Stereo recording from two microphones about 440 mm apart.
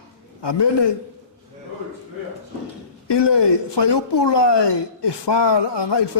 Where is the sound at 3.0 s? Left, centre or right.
Left.